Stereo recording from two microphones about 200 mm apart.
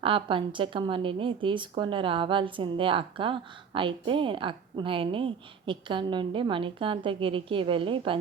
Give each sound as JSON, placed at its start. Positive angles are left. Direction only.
{"t": 0.0, "sound": "a woman's voice", "side_deg": -25}